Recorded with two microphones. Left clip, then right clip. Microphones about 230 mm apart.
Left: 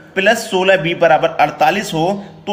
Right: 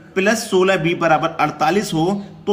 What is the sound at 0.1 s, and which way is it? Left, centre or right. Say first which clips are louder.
A man's voice: left 3 dB; centre.